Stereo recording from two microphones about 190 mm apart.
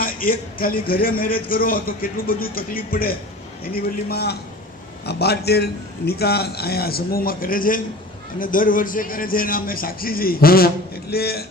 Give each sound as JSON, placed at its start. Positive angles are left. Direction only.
{"t": 0.0, "sound": "a man's voice", "side_deg": 50}